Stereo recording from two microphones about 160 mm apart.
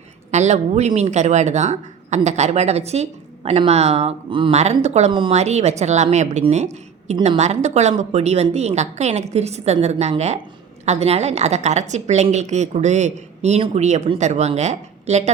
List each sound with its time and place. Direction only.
0.3 s a woman's voice: 45° right (ahead or behind)
4.5 s a woman's voice: 45° right (ahead or behind)